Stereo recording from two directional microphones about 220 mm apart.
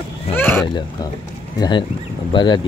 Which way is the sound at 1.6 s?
20° left (ahead or behind).